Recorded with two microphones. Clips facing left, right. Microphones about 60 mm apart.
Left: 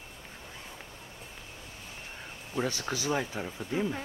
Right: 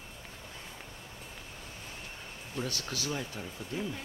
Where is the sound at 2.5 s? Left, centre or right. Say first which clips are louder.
Left 5 dB; left.